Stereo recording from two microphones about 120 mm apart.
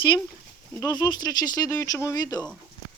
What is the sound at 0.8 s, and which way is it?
Speech, 35° left (ahead or behind).